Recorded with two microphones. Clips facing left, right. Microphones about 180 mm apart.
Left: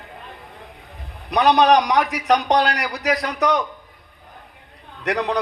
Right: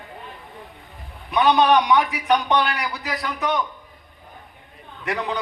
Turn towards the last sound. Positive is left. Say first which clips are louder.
# left 5 dB
turn(degrees=75)  # may be behind; listen again after turning